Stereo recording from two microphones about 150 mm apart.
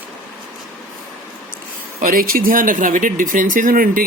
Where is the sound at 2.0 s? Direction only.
75° right (ahead or behind).